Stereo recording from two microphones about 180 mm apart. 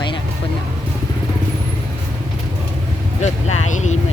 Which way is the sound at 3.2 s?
40° left (ahead or behind).